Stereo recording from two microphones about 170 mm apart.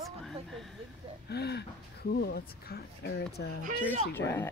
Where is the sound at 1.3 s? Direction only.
75° left (ahead or behind).